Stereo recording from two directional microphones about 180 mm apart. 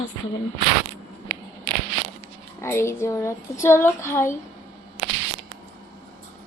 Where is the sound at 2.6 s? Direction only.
15° left (ahead or behind).